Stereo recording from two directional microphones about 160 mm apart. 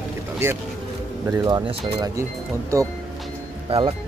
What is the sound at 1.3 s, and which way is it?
Speech, 20° right (ahead or behind).